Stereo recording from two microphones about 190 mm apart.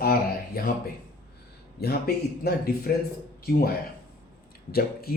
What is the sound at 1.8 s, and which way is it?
Speech, 55° left (ahead or behind).